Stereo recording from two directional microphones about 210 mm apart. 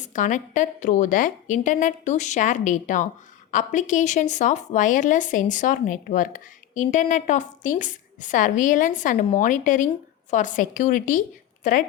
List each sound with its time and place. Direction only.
0.0 s a woman's voice: 35° left (ahead or behind)